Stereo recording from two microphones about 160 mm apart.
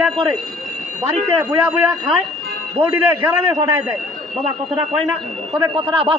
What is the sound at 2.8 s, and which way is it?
A man's voice, 15° right (ahead or behind).